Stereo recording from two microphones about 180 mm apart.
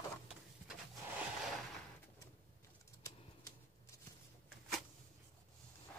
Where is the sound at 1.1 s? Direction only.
5° right (ahead or behind).